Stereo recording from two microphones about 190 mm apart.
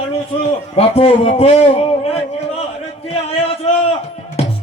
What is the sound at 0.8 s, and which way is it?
Speech, 30° left (ahead or behind).